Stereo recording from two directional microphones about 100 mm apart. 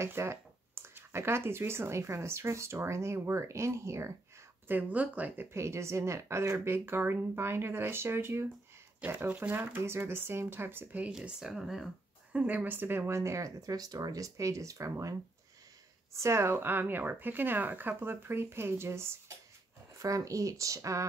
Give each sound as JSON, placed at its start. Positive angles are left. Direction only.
{"t": 0.0, "sound": "speech", "side_deg": -25}
{"t": 4.6, "sound": "speech", "side_deg": -15}
{"t": 12.3, "sound": "speech", "side_deg": -15}